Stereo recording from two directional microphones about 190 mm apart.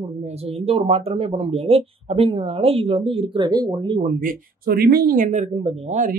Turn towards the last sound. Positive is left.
turn(degrees=-40)  # may be behind; listen again after turning